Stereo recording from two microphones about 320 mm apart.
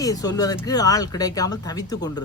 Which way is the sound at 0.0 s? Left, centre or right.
Centre.